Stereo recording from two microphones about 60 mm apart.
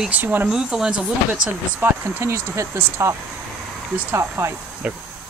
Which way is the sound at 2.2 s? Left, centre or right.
Right.